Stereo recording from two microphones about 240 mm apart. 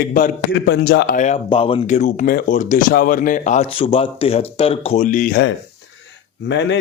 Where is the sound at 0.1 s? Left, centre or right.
Left.